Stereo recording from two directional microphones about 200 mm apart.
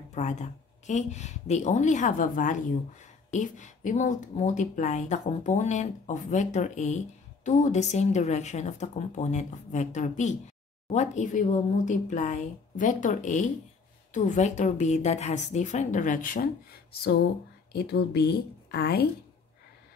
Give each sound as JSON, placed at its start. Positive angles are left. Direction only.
{"t": 0.1, "sound": "speech", "side_deg": 35}
{"t": 17.7, "sound": "speech", "side_deg": 55}